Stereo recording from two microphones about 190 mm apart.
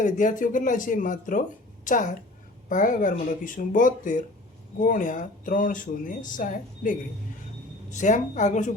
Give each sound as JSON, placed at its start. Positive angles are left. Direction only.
{"t": 0.0, "sound": "a woman's voice", "side_deg": 40}